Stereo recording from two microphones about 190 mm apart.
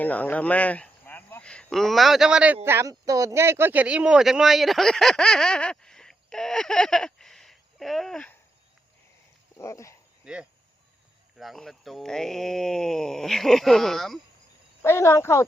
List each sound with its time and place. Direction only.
0.0 s speech: 10° left (ahead or behind)
9.6 s speech: 15° left (ahead or behind)
10.3 s speech: 5° right (ahead or behind)
14.8 s speech: 15° left (ahead or behind)